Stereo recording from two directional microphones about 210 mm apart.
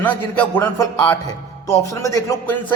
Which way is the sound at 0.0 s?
10° left (ahead or behind).